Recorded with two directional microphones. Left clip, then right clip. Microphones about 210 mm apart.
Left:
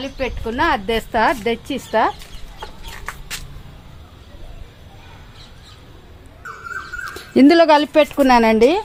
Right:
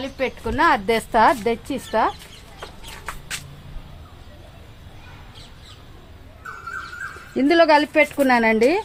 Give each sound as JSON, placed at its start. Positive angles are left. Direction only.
{"t": 0.0, "sound": "a woman's voice", "side_deg": -15}
{"t": 1.6, "sound": "speech", "side_deg": 10}
{"t": 7.3, "sound": "a woman's voice", "side_deg": 50}